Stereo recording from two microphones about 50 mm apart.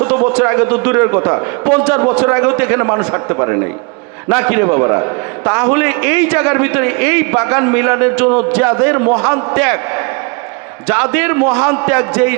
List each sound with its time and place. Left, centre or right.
0.0 s a man's voice: right
3.3 s a man's voice: right
4.3 s a man's voice: right
5.5 s a man's voice: right
10.8 s a man's voice: right